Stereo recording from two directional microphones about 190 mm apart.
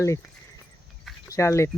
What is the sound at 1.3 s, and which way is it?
Speech, 15° left (ahead or behind).